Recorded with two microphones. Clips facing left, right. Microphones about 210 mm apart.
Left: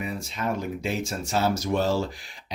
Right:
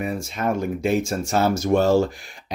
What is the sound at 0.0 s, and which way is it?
Speech, 50° right (ahead or behind).